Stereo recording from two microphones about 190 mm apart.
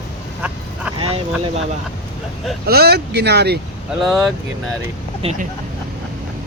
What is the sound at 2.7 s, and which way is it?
Speech, 55° right (ahead or behind).